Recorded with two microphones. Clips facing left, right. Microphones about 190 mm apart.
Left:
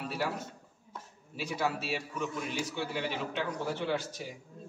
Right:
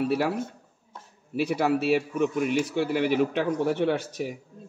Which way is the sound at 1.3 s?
65° right (ahead or behind).